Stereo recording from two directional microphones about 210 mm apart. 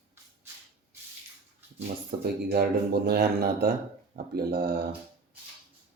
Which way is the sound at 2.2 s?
45° right (ahead or behind).